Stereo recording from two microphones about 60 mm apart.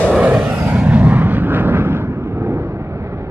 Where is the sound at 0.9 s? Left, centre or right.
Right.